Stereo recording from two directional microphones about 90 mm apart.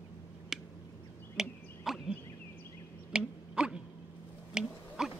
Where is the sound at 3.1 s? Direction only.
10° right (ahead or behind).